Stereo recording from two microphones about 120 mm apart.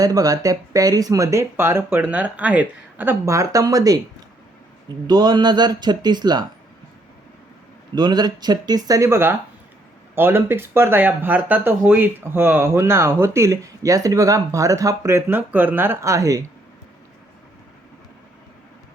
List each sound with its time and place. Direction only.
0.0 s speech: 30° right (ahead or behind)
5.0 s speech: 35° right (ahead or behind)
7.9 s speech: 35° right (ahead or behind)